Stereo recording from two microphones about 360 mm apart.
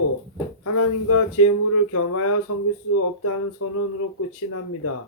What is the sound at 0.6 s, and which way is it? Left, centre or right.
Speech, left.